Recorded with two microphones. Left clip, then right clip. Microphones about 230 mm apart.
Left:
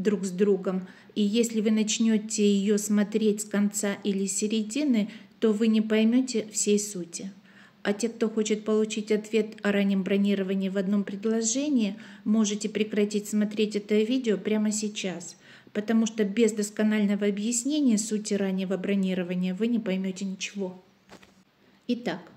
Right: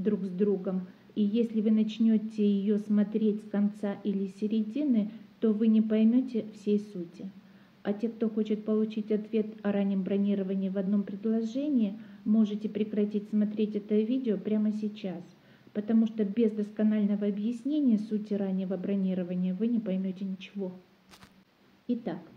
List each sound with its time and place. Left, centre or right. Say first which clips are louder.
0.0 s speech: left 4 dB; left
21.8 s speech: left 4 dB; left